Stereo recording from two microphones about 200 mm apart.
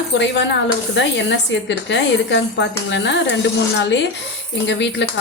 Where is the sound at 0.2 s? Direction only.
60° left (ahead or behind).